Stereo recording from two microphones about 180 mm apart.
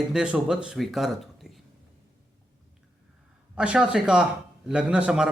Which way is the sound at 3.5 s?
5° right (ahead or behind).